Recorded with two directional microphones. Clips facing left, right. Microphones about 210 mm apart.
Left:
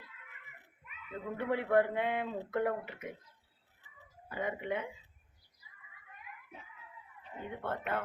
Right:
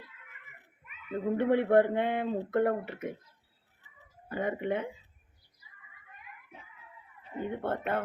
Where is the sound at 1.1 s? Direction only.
35° right (ahead or behind).